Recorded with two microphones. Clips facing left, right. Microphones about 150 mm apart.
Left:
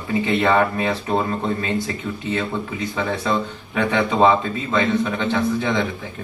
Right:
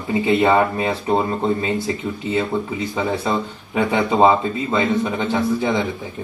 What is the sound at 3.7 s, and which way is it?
A man's voice, 15° right (ahead or behind).